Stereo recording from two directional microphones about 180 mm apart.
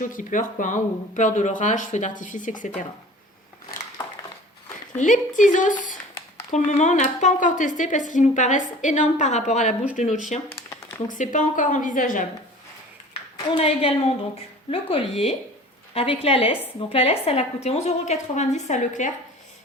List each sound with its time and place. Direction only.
0.0 s speech: 45° left (ahead or behind)
4.9 s a woman's voice: 45° left (ahead or behind)
13.6 s a woman's voice: 35° left (ahead or behind)